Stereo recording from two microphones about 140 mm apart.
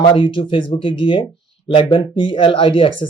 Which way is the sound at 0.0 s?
40° left (ahead or behind).